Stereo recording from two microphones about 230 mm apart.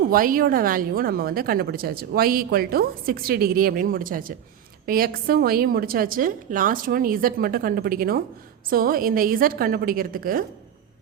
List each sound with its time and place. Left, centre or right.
0.1 s a woman's voice: right